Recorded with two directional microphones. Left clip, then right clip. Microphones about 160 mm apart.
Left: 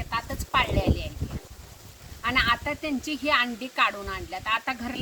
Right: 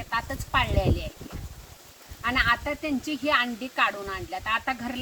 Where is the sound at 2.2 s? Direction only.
15° left (ahead or behind).